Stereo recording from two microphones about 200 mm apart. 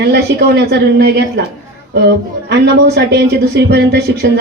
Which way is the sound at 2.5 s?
55° right (ahead or behind).